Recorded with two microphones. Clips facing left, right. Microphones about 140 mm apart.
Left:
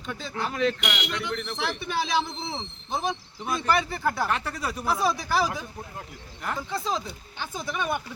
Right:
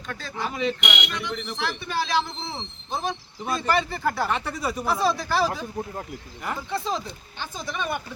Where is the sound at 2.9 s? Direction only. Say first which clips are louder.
Even; 15° left (ahead or behind); by 4.8 s 10° right (ahead or behind).